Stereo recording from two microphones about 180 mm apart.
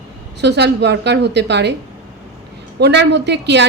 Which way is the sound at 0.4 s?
70° right (ahead or behind).